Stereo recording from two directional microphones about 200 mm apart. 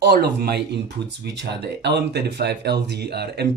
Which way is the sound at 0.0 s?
50° right (ahead or behind).